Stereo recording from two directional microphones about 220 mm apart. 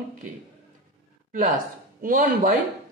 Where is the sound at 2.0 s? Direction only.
40° right (ahead or behind).